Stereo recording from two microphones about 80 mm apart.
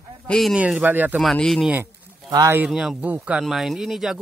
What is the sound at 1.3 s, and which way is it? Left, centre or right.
Speech, centre.